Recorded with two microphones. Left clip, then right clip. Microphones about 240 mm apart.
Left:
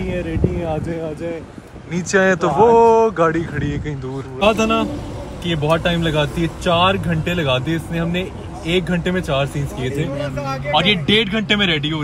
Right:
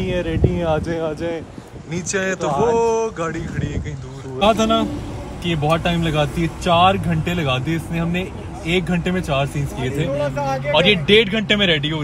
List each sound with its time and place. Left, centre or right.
0.0 s speech: centre